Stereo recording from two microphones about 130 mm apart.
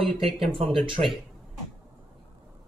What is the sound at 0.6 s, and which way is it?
Speech, 40° right (ahead or behind).